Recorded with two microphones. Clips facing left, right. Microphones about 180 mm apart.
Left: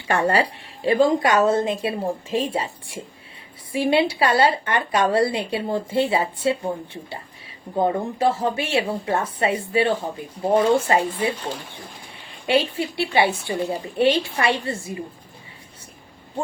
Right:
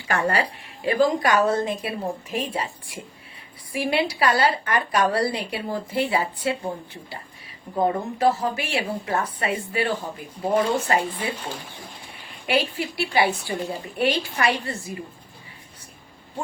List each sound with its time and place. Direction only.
0.1 s speech: 30° left (ahead or behind)
3.7 s speech: 25° left (ahead or behind)
12.5 s speech: 25° left (ahead or behind)